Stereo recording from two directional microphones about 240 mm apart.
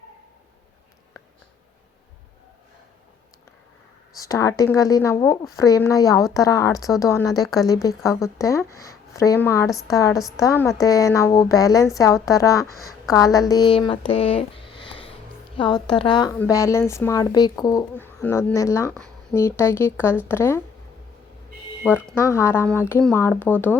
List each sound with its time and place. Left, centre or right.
4.2 s speech: centre
21.9 s speech: centre